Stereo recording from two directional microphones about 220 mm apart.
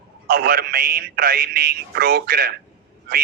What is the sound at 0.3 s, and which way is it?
Speech, 45° right (ahead or behind).